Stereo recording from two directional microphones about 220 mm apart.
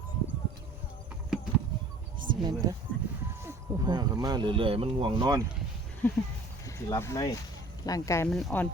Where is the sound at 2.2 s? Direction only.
40° right (ahead or behind).